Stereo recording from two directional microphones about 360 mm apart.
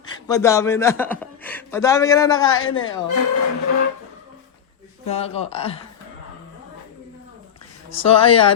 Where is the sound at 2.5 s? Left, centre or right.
Left.